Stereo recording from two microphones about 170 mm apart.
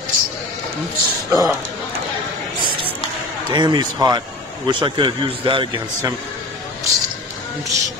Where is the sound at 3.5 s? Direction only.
25° right (ahead or behind).